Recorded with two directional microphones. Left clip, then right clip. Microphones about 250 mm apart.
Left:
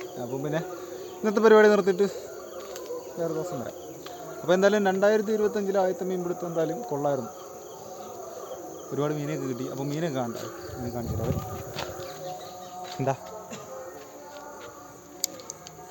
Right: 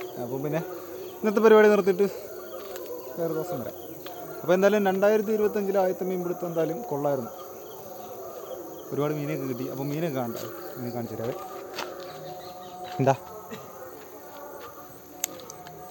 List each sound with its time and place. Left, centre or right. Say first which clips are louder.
0.0 s speech: right 1 dB; centre
2.7 s insect: left 1 dB; centre
4.4 s speech: even; centre
9.0 s speech: right 1 dB; centre
13.0 s speech: right 5 dB; right